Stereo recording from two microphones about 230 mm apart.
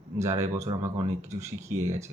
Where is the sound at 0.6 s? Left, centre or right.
Centre.